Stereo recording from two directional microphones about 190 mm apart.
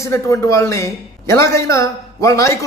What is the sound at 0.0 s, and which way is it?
A man's voice, 15° left (ahead or behind).